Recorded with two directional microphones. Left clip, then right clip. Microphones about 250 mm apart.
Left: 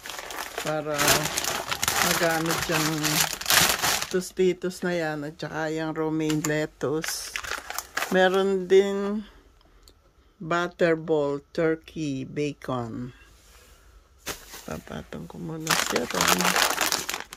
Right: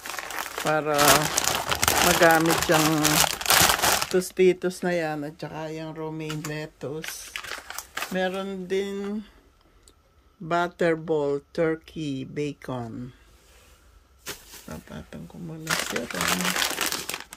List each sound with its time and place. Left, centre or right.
0.7 s speech: centre
0.9 s speech: right
4.1 s speech: centre
10.5 s speech: centre
14.7 s speech: centre
15.6 s speech: left